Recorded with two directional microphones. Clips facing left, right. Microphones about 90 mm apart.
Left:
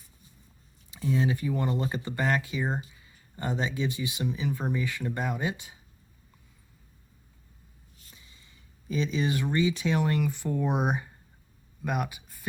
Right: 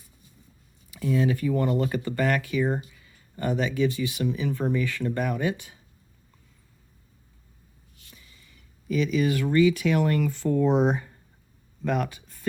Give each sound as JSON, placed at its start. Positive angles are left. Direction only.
{"t": 0.9, "sound": "speech", "side_deg": 25}
{"t": 8.1, "sound": "speech", "side_deg": 25}